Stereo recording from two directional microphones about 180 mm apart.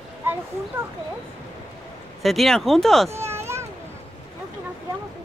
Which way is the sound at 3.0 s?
15° right (ahead or behind).